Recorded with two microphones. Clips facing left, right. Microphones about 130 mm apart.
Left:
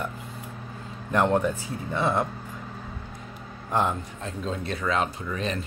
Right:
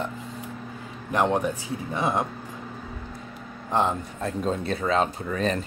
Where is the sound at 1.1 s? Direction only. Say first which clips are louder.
Left 1 dB; 15° right (ahead or behind).